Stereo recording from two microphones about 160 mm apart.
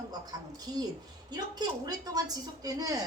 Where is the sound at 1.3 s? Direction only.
25° right (ahead or behind).